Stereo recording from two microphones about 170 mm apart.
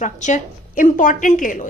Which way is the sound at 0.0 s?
45° left (ahead or behind).